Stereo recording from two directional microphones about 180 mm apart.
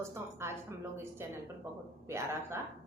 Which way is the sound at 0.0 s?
15° right (ahead or behind).